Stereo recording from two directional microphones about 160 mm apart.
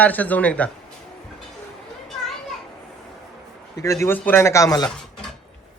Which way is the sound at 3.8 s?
20° left (ahead or behind).